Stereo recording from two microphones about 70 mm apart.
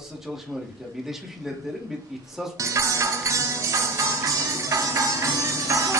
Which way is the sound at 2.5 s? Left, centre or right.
Right.